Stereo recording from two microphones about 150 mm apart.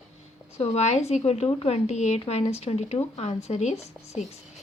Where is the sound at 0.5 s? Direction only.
45° left (ahead or behind).